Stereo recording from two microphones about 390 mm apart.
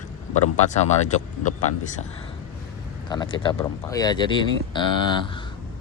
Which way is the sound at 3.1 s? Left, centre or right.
Centre.